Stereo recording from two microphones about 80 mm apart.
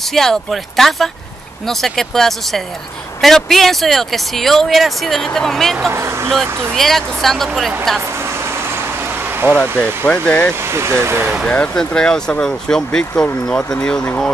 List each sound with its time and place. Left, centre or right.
0.1 s speech: centre
5.9 s speech: right
6.3 s speech: centre
9.5 s speech: centre
10.7 s speech: right
11.4 s speech: centre